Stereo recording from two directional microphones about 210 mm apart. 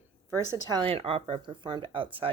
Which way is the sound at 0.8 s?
25° right (ahead or behind).